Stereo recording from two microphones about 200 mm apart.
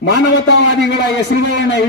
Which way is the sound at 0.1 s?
60° left (ahead or behind).